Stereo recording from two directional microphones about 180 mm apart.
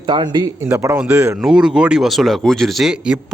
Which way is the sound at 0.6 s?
15° right (ahead or behind).